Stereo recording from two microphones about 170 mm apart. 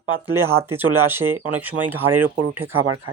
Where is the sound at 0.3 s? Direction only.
15° right (ahead or behind).